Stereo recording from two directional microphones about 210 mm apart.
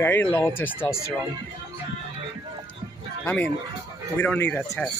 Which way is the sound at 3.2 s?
5° left (ahead or behind).